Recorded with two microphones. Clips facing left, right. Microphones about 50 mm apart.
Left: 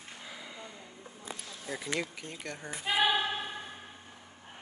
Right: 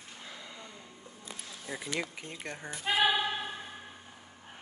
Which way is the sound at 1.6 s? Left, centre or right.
Centre.